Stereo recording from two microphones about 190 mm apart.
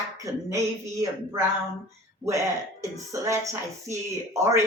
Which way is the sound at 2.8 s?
15° right (ahead or behind).